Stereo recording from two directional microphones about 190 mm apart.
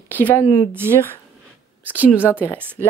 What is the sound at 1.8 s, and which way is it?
Speech, 10° right (ahead or behind).